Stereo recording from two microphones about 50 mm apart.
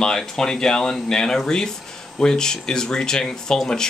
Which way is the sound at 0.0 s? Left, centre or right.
Centre.